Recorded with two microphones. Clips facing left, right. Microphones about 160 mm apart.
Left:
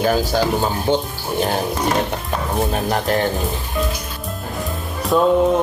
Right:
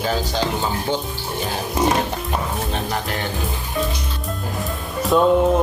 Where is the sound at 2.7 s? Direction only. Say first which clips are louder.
Left 6 dB; 45° left (ahead or behind).